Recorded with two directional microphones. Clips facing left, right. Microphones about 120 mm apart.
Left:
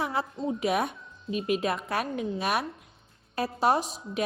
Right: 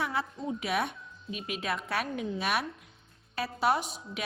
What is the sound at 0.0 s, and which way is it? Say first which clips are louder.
Speech: left 3 dB; 40° left (ahead or behind).